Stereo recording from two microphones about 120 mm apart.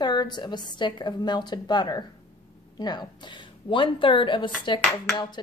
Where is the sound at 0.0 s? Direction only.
35° left (ahead or behind).